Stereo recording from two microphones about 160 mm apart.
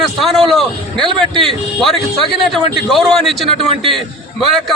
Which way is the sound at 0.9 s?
30° right (ahead or behind).